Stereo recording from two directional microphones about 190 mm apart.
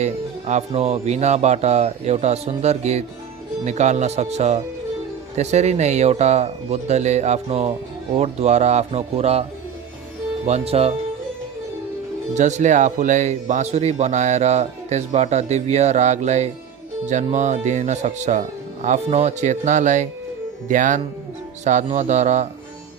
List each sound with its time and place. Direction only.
0.0 s speech: 35° right (ahead or behind)
12.3 s speech: 40° right (ahead or behind)